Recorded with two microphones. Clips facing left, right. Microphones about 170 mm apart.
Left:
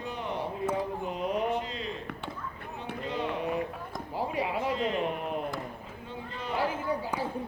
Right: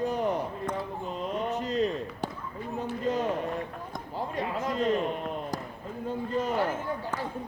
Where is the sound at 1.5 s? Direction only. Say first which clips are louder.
Right 5 dB; 40° right (ahead or behind).